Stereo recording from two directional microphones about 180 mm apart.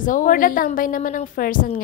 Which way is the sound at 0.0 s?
45° left (ahead or behind).